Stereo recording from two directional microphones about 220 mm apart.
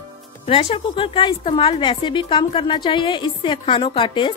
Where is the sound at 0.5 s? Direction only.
25° left (ahead or behind).